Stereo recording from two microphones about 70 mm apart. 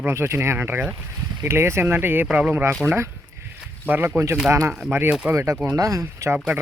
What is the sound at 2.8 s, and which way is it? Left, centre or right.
Speech, right.